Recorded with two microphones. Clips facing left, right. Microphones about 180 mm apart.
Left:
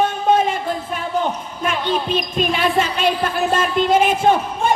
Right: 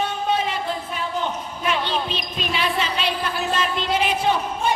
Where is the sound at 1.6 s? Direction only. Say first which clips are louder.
Left 4 dB; 50° left (ahead or behind).